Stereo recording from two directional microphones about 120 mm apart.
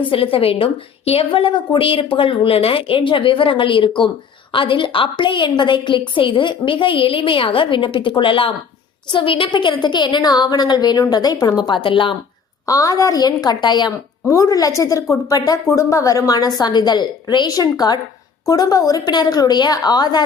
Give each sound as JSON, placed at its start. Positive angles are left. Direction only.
{"t": 0.0, "sound": "a woman's voice", "side_deg": 50}
{"t": 12.6, "sound": "a woman's voice", "side_deg": 30}
{"t": 14.3, "sound": "a woman's voice", "side_deg": 30}